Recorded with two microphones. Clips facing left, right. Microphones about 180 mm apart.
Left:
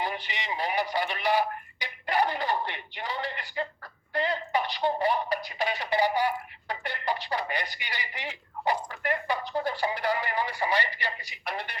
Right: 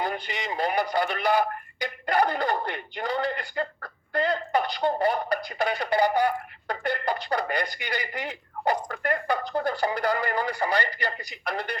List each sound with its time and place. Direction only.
0.0 s speech: 45° right (ahead or behind)